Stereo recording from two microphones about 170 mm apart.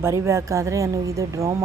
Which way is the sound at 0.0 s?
15° right (ahead or behind).